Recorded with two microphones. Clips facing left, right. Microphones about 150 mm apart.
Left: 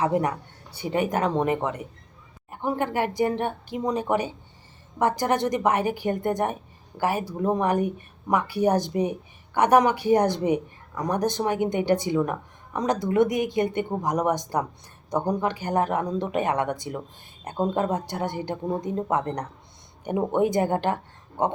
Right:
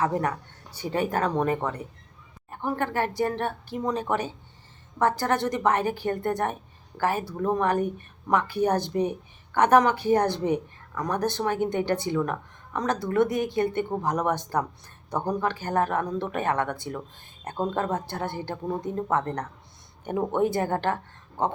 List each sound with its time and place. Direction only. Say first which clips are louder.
0.0 s a woman's voice: left 2 dB; 15° left (ahead or behind)